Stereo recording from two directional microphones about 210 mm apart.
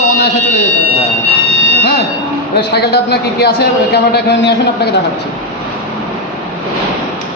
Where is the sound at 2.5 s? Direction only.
50° left (ahead or behind).